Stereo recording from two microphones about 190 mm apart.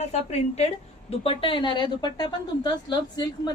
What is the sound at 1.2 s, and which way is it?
A woman's voice, 30° left (ahead or behind).